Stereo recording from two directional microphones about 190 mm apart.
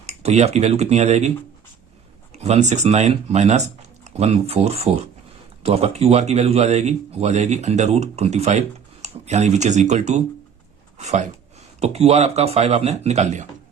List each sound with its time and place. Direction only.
0.0 s a man's voice: 35° right (ahead or behind)
2.3 s a man's voice: 35° right (ahead or behind)